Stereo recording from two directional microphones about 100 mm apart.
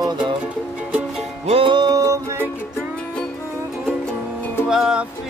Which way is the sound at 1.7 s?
40° right (ahead or behind).